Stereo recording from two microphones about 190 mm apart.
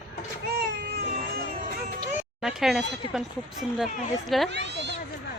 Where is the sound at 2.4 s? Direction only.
Centre (ahead or behind).